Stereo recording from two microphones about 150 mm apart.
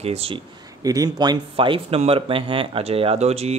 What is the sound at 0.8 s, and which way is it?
Speech, 25° right (ahead or behind).